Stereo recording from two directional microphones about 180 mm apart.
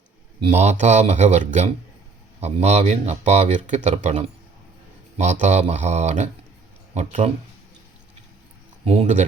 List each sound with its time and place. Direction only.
0.4 s speech: 40° right (ahead or behind)
8.8 s speech: 35° right (ahead or behind)